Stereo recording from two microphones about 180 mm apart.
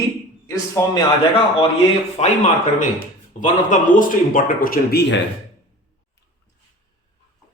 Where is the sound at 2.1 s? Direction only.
40° left (ahead or behind); by 5.2 s 70° left (ahead or behind).